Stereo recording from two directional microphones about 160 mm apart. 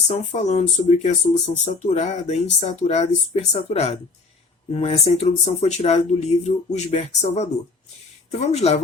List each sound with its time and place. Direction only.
0.3 s speech: 45° left (ahead or behind)